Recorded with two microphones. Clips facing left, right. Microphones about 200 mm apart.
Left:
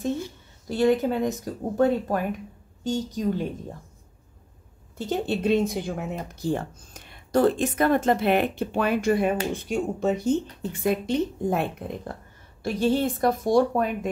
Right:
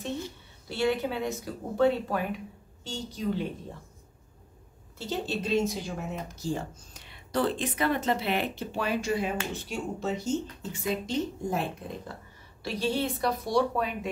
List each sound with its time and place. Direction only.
0.7 s a woman's voice: 45° left (ahead or behind)
4.9 s a woman's voice: 55° left (ahead or behind)
12.6 s a woman's voice: 50° left (ahead or behind)